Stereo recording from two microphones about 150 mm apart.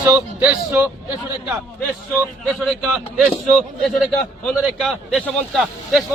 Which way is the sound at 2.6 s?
Centre (ahead or behind).